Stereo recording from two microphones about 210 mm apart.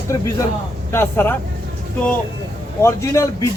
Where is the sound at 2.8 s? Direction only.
15° left (ahead or behind).